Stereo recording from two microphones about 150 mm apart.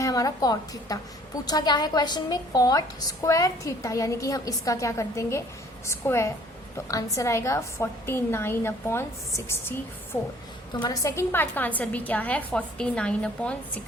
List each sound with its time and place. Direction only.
0.0 s a woman's voice: 25° left (ahead or behind)
10.8 s a woman's voice: 20° left (ahead or behind)